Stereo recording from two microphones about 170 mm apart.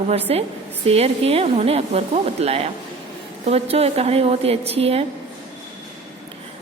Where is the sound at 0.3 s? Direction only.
35° right (ahead or behind).